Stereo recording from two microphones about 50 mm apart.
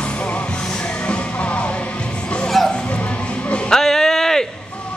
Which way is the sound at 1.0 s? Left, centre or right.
Left.